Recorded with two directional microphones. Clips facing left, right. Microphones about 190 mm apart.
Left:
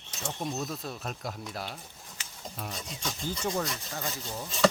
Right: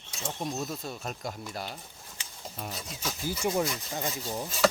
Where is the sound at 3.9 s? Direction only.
20° right (ahead or behind).